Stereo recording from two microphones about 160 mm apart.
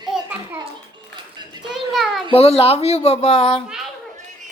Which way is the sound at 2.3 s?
40° left (ahead or behind).